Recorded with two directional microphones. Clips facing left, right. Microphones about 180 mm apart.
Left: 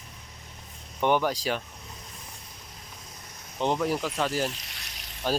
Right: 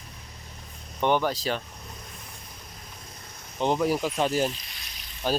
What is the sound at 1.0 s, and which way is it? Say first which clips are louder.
Speech: even; 10° left (ahead or behind).